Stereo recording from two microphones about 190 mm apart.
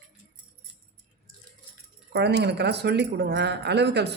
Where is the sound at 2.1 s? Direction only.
60° right (ahead or behind).